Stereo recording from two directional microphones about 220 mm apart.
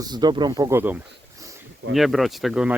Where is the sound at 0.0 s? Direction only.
20° right (ahead or behind).